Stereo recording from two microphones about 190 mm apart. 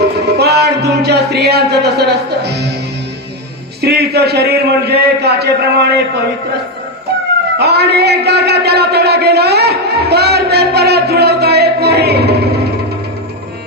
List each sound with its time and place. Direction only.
0.3 s music: 60° right (ahead or behind)
3.8 s a man's voice: 60° right (ahead or behind)
7.6 s a man's voice: 60° right (ahead or behind)